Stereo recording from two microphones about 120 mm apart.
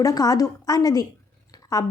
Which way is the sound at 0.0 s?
30° left (ahead or behind).